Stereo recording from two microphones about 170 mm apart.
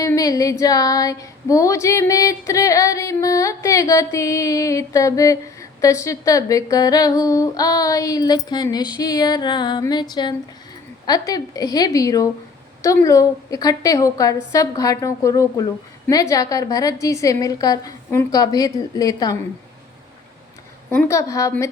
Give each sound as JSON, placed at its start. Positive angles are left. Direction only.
{"t": 0.0, "sound": "female singing", "side_deg": 20}
{"t": 0.6, "sound": "a sound", "side_deg": 20}
{"t": 20.9, "sound": "a woman's voice", "side_deg": 15}